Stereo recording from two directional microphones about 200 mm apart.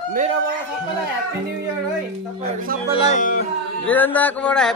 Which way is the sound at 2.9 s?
35° left (ahead or behind).